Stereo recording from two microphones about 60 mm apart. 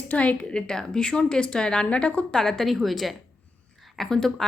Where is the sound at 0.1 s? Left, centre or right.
Left.